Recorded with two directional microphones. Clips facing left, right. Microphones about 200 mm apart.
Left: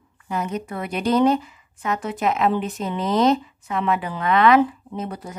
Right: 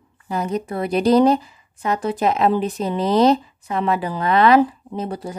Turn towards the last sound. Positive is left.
turn(degrees=-30)  # may be behind; listen again after turning